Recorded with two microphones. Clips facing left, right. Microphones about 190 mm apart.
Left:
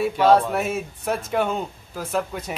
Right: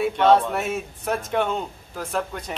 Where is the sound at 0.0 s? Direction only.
Centre (ahead or behind).